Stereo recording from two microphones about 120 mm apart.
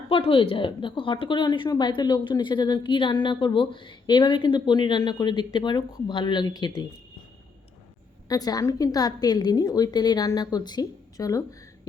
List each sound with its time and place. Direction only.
0.1 s a woman's voice: 50° left (ahead or behind)
8.3 s a woman's voice: 30° left (ahead or behind)